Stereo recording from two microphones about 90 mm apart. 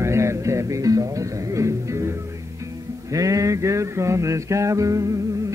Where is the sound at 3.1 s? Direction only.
40° right (ahead or behind).